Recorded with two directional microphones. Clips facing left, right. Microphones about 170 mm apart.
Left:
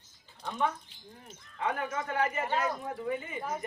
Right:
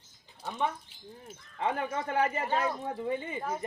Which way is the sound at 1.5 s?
30° right (ahead or behind).